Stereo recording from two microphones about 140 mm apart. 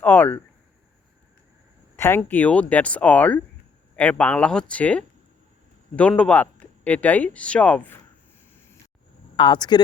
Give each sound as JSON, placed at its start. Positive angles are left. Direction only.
{"t": 0.0, "sound": "speech", "side_deg": 10}
{"t": 2.0, "sound": "speech", "side_deg": 15}
{"t": 9.3, "sound": "speech", "side_deg": 35}